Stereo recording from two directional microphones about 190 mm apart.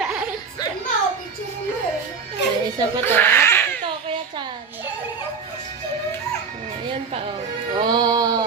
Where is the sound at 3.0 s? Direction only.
10° left (ahead or behind).